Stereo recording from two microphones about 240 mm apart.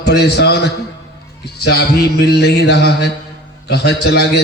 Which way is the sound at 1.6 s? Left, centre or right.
Left.